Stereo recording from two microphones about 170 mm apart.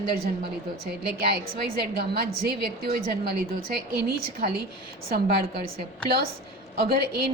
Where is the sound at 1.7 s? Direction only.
65° right (ahead or behind).